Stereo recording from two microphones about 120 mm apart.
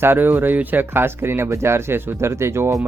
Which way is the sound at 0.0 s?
15° right (ahead or behind).